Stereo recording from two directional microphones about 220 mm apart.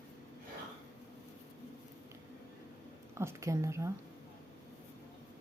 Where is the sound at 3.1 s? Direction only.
15° right (ahead or behind).